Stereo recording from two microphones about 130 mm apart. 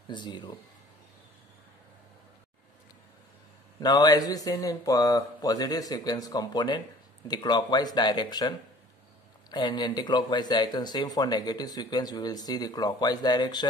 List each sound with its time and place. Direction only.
0.1 s speech: 35° left (ahead or behind)
3.8 s speech: 30° left (ahead or behind)